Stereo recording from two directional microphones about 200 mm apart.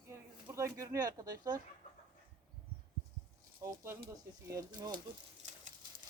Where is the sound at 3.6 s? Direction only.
10° right (ahead or behind).